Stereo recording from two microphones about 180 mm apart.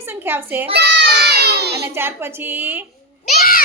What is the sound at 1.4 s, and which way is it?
Child singing, 65° right (ahead or behind).